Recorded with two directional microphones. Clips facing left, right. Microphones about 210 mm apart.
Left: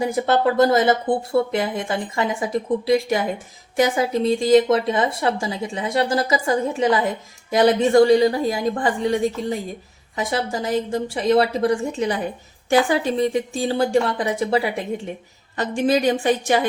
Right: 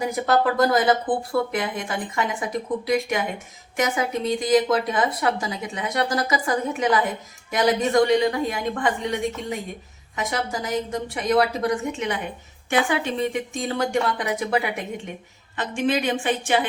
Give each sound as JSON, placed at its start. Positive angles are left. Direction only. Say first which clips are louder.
{"t": 0.0, "sound": "a woman's voice", "louder": "left 2 dB", "side_deg": 25}